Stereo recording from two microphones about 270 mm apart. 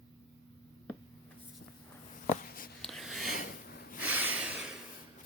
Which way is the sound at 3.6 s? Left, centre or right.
Left.